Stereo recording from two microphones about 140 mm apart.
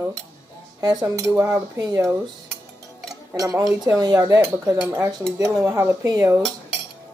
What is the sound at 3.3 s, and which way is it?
Speech, 25° right (ahead or behind).